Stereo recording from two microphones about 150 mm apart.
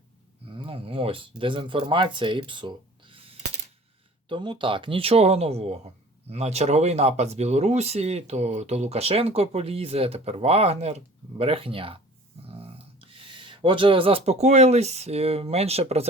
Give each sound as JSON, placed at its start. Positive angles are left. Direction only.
{"t": 0.5, "sound": "speech", "side_deg": -35}